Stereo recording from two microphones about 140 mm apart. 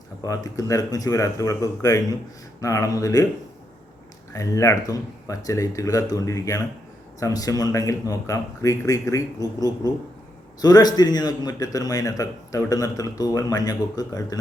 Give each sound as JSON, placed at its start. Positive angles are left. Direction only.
{"t": 0.2, "sound": "a man's voice", "side_deg": 25}
{"t": 4.3, "sound": "a man's voice", "side_deg": 20}